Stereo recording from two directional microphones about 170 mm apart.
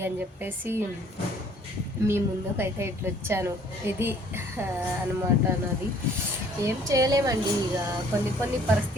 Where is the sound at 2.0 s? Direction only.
15° right (ahead or behind).